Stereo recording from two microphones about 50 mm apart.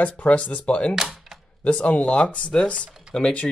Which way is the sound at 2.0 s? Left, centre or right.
Left.